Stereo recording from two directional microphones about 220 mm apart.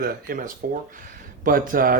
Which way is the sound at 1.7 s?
40° right (ahead or behind).